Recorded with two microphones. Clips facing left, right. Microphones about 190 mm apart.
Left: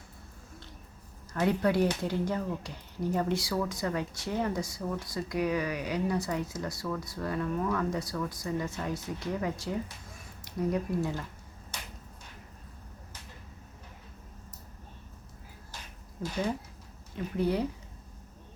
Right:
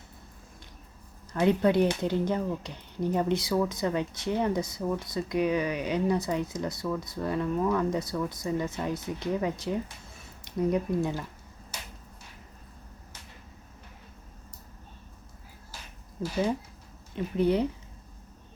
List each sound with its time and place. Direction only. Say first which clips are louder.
1.3 s speech: right 4 dB; 20° right (ahead or behind)
17.3 s speech: right 4 dB; 20° right (ahead or behind)